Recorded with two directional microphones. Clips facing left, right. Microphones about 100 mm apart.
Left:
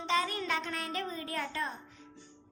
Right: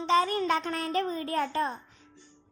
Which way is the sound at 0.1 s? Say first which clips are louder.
Right 7 dB; 40° right (ahead or behind).